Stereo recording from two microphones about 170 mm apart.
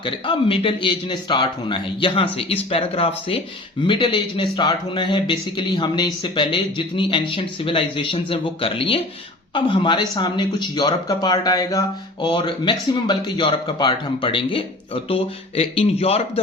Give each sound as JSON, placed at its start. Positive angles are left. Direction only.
{"t": 0.0, "sound": "a man's voice", "side_deg": 30}